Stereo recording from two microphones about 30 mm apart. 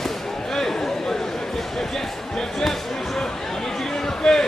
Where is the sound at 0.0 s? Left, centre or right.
Centre.